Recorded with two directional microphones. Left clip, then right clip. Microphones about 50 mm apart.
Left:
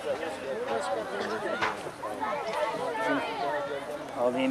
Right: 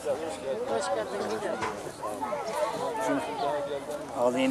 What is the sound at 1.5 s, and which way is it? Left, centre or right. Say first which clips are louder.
Speech: left 2 dB; left.